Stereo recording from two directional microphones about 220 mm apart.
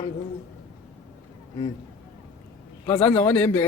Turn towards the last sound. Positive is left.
turn(degrees=10)  # may be behind; listen again after turning